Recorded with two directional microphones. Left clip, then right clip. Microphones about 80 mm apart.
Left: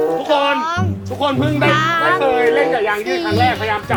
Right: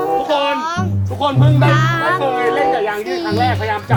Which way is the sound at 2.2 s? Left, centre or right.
Left.